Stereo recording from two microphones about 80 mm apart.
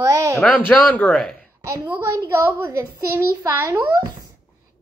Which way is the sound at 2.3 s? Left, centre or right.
Right.